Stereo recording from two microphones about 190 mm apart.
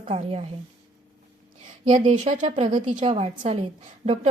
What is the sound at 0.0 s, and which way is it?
Speech, 30° right (ahead or behind).